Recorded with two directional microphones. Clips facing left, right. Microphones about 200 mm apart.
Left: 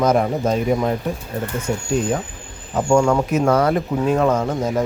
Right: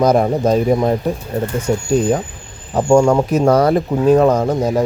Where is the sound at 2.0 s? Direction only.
35° right (ahead or behind).